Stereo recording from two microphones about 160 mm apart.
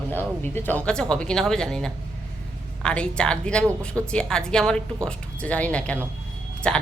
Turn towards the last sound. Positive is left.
turn(degrees=5)  # may be behind; listen again after turning